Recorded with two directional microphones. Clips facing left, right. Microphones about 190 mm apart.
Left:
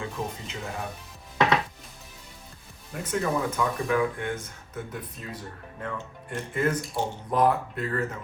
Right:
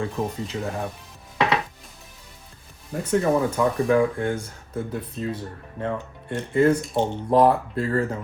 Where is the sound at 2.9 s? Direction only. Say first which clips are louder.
Right 6 dB; 30° right (ahead or behind).